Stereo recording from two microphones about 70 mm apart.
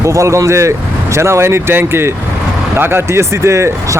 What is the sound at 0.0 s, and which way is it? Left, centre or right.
Speech, right.